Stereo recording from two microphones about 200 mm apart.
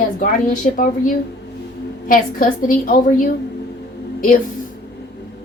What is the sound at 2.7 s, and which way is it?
Speech, 45° left (ahead or behind).